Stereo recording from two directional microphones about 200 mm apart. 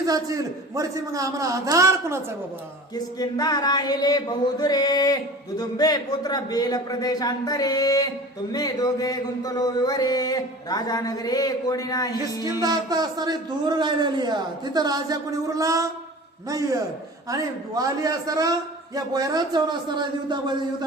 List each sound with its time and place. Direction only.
0.0 s a man's voice: 15° right (ahead or behind)
2.9 s speech: 20° left (ahead or behind)
12.4 s a man's voice: 20° right (ahead or behind)